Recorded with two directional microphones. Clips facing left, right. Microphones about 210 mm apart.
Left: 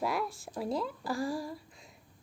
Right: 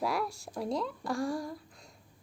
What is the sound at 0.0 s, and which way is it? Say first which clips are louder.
A woman's voice: right 1 dB; centre (ahead or behind).